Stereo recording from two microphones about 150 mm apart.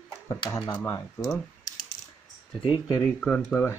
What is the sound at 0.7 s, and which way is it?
Speech, 15° left (ahead or behind).